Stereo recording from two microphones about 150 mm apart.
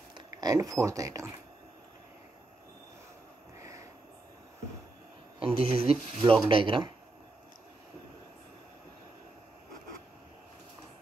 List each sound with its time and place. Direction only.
0.4 s speech: 25° right (ahead or behind)
3.5 s a sound: 20° right (ahead or behind)
5.4 s speech: 40° right (ahead or behind)